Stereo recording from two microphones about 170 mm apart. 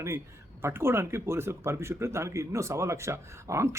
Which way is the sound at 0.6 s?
15° right (ahead or behind).